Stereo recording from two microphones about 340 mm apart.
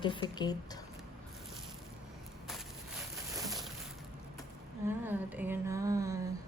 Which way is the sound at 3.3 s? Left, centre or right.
Centre.